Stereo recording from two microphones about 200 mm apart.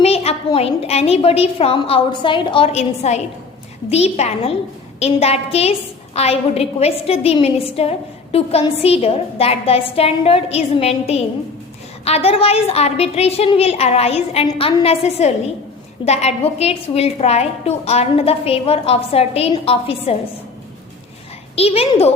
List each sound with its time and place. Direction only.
0.0 s a woman's voice: 30° left (ahead or behind)
21.5 s a woman's voice: 30° left (ahead or behind)